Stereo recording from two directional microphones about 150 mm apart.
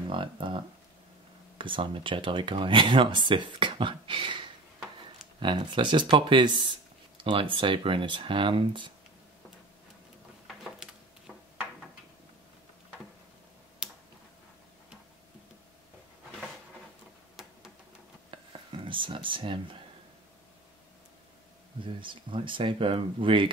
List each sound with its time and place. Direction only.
0.1 s speech: 35° right (ahead or behind)
10.4 s a sound: centre (ahead or behind)
17.4 s tick-tock: centre (ahead or behind)
18.3 s stir: 35° right (ahead or behind)
18.7 s a sound: 35° right (ahead or behind)
21.8 s speech: 35° right (ahead or behind)